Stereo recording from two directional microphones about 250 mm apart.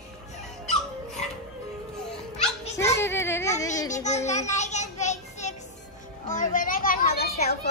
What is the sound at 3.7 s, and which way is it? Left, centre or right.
Speech, centre.